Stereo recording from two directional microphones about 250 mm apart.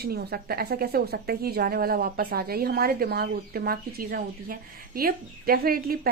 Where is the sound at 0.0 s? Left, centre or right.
Right.